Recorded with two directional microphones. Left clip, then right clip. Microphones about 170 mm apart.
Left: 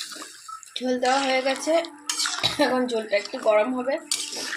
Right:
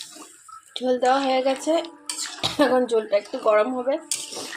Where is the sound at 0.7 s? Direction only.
15° right (ahead or behind).